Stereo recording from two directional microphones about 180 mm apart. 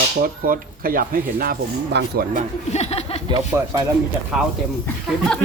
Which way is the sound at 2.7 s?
35° left (ahead or behind).